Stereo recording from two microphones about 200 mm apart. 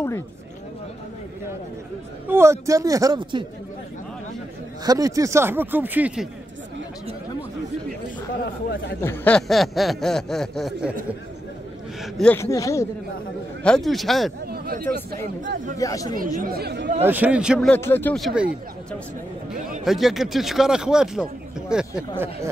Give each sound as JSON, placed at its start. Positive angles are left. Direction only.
{"t": 2.2, "sound": "speech", "side_deg": -10}
{"t": 4.8, "sound": "speech", "side_deg": -15}
{"t": 9.0, "sound": "speech", "side_deg": 10}
{"t": 12.0, "sound": "speech", "side_deg": 5}
{"t": 12.4, "sound": "speech", "side_deg": 15}
{"t": 13.7, "sound": "speech", "side_deg": 0}
{"t": 14.4, "sound": "speech", "side_deg": -50}
{"t": 15.8, "sound": "speech", "side_deg": 15}
{"t": 16.3, "sound": "speech", "side_deg": -50}
{"t": 17.0, "sound": "speech", "side_deg": -10}
{"t": 17.7, "sound": "speech", "side_deg": 10}